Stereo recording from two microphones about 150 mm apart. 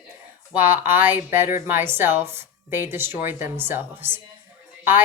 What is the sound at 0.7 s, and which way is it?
A woman's voice, 15° right (ahead or behind).